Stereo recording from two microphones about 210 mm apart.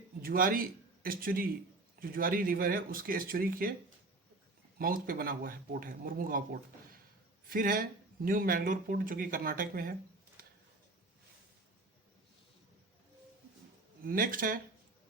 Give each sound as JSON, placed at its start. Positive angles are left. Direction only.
{"t": 0.2, "sound": "a man's voice", "side_deg": -45}
{"t": 14.0, "sound": "speech", "side_deg": -40}